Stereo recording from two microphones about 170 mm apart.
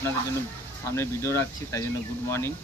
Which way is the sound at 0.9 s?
15° left (ahead or behind).